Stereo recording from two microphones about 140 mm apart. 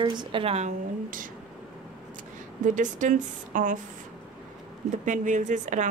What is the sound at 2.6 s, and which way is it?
A woman's voice, 65° right (ahead or behind).